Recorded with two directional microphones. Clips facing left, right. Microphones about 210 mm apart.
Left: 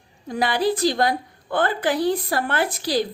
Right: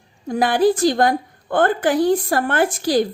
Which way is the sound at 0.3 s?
50° right (ahead or behind).